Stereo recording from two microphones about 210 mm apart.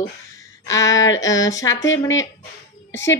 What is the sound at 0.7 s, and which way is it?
Speech, 15° left (ahead or behind).